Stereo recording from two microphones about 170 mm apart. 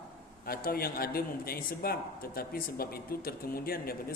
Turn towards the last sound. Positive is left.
turn(degrees=60)  # may be behind; listen again after turning